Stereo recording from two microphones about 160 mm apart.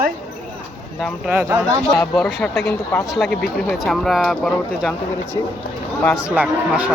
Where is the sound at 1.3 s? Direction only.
15° right (ahead or behind).